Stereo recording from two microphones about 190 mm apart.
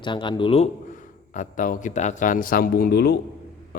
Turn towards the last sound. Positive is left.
turn(degrees=55)  # may be behind; listen again after turning